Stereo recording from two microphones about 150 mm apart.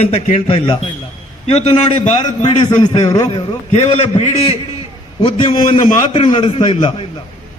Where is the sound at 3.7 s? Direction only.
50° left (ahead or behind).